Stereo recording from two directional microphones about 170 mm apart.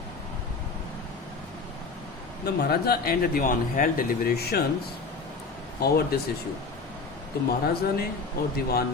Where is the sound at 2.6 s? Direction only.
65° left (ahead or behind).